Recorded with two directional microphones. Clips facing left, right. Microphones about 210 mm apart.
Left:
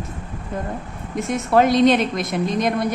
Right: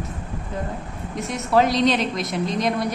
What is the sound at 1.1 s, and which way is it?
A woman's voice, 50° left (ahead or behind).